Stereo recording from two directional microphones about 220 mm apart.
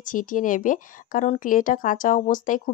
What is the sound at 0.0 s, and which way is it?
A woman's voice, 35° left (ahead or behind).